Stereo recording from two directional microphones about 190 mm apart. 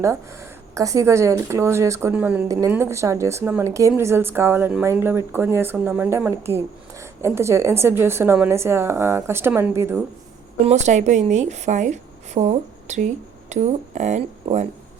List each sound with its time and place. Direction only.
0.7 s speech: 15° right (ahead or behind)
10.7 s a woman's voice: 35° right (ahead or behind)